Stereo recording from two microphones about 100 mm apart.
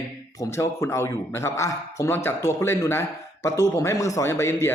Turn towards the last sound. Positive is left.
turn(degrees=25)  # may be behind; listen again after turning